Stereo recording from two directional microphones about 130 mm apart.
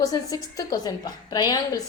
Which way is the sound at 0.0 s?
25° left (ahead or behind).